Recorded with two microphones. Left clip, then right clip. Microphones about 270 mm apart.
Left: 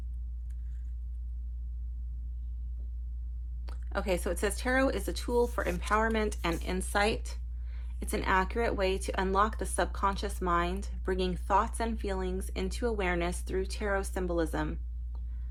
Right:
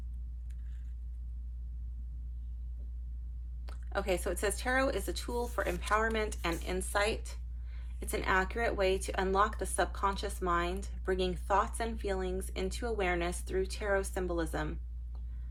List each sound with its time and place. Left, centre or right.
3.7 s speech: left